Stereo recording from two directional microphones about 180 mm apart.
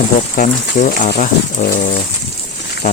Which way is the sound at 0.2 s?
45° left (ahead or behind).